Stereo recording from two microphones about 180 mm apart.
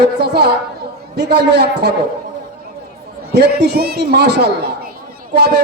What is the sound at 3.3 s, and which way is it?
A man's voice, 65° right (ahead or behind).